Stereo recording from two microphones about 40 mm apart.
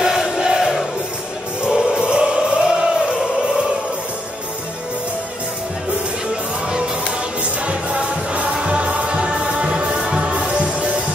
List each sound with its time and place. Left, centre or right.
0.0 s crowd: centre
1.6 s music: right
7.6 s music: right